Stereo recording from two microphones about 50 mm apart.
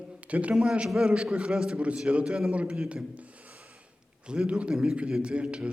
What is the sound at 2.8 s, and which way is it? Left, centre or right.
Speech, centre.